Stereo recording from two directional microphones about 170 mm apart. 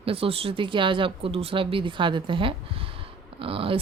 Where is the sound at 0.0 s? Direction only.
35° right (ahead or behind).